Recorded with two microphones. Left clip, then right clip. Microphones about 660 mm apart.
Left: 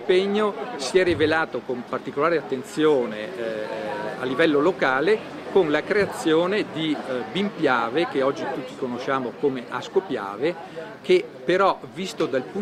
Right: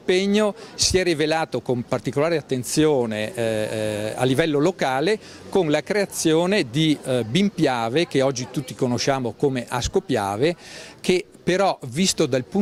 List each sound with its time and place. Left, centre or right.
0.1 s speech: right